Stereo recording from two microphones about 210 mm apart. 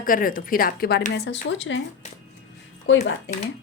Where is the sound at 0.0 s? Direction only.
40° left (ahead or behind); by 1.8 s 60° left (ahead or behind).